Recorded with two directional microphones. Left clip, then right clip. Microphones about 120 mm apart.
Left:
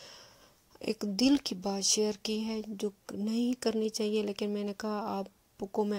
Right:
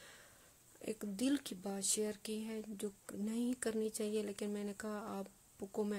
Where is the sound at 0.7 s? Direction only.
45° left (ahead or behind).